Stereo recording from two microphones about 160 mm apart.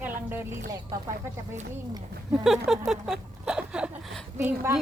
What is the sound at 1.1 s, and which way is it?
Speech, 50° right (ahead or behind).